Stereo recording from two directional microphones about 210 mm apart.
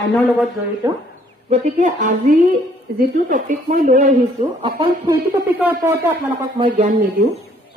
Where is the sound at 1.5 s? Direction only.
35° right (ahead or behind).